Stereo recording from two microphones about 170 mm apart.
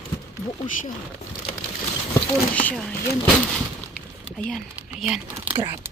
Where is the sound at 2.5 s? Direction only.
10° left (ahead or behind).